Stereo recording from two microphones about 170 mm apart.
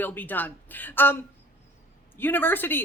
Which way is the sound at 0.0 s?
10° left (ahead or behind).